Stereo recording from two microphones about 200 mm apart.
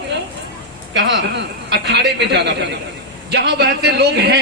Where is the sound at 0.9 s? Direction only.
65° right (ahead or behind).